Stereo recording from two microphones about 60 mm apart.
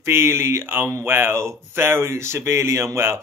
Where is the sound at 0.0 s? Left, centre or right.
Right.